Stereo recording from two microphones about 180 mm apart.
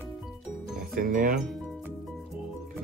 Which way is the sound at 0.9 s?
50° right (ahead or behind).